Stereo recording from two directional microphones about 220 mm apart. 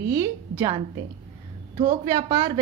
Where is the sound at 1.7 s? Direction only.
30° right (ahead or behind).